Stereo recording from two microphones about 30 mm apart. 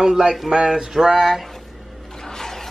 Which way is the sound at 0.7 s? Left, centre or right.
Centre.